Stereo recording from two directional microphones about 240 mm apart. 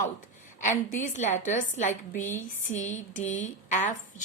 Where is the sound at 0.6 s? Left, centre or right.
Left.